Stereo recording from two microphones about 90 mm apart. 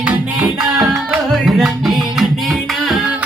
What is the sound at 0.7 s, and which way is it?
Music, 5° right (ahead or behind).